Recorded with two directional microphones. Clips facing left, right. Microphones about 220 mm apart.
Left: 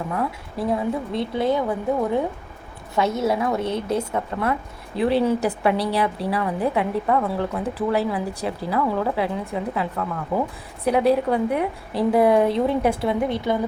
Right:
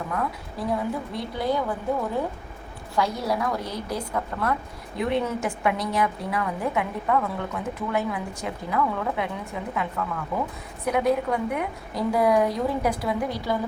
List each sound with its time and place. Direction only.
0.2 s a woman's voice: 25° left (ahead or behind)
2.9 s a woman's voice: 25° left (ahead or behind)